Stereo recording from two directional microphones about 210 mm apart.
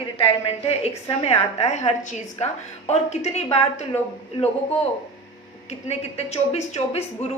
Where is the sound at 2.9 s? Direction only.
30° left (ahead or behind).